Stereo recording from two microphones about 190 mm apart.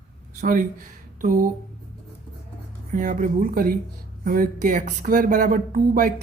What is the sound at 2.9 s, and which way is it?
Speech, 45° right (ahead or behind).